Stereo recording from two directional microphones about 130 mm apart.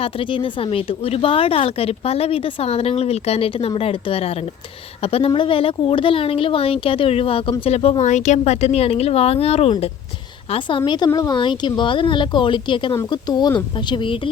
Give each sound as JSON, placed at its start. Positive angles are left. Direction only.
{"t": 0.0, "sound": "speech", "side_deg": 40}
{"t": 10.5, "sound": "speech", "side_deg": 40}